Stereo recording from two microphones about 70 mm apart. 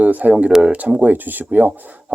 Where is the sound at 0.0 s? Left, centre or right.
Right.